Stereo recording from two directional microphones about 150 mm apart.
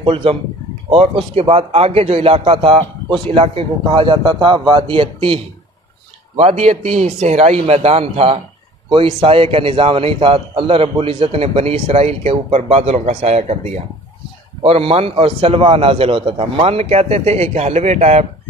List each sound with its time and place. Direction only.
0.0 s a man's voice: 35° right (ahead or behind)
6.3 s a man's voice: 45° right (ahead or behind)